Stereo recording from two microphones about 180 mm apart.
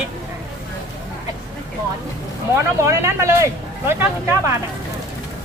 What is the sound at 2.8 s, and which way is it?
Speech, 15° right (ahead or behind).